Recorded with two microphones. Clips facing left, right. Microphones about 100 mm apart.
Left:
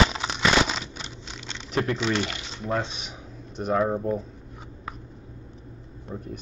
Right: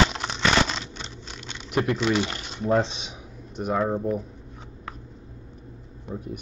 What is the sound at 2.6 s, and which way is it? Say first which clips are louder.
Speech: right 6 dB; 20° right (ahead or behind).